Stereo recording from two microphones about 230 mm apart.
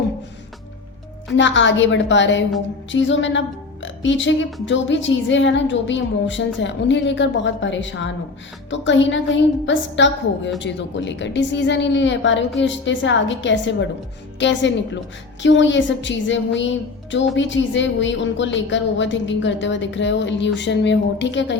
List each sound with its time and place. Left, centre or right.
1.3 s a woman's voice: left